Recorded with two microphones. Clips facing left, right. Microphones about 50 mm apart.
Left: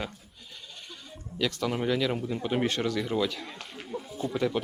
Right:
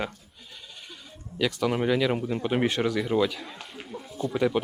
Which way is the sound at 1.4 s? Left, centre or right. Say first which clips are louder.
Right 3 dB; centre.